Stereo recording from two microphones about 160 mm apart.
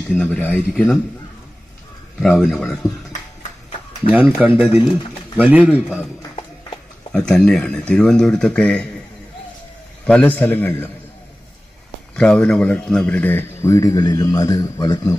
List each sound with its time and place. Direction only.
0.1 s speech: 10° left (ahead or behind)
2.1 s speech: 5° left (ahead or behind)
4.1 s a man's voice: 10° right (ahead or behind)
7.1 s speech: 5° left (ahead or behind)
10.0 s speech: 10° left (ahead or behind)
12.2 s speech: 5° left (ahead or behind); by 15.1 s 20° left (ahead or behind)